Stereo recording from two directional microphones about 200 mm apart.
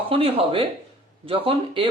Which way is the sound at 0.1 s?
25° right (ahead or behind).